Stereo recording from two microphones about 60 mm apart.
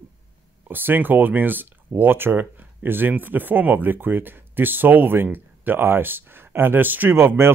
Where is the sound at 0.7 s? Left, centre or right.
Right.